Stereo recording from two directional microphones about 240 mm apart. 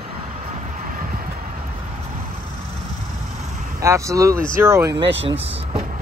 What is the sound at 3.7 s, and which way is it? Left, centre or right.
Speech, centre.